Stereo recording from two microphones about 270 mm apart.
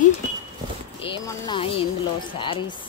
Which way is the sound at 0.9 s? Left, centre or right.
Centre.